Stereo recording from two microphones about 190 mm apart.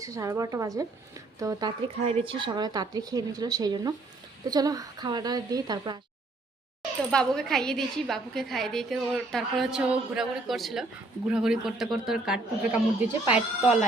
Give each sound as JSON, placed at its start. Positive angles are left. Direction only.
{"t": 0.0, "sound": "speech", "side_deg": -15}
{"t": 7.1, "sound": "a woman's voice", "side_deg": 5}